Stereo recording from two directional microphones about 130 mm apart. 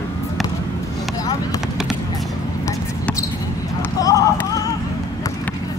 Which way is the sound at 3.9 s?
25° left (ahead or behind).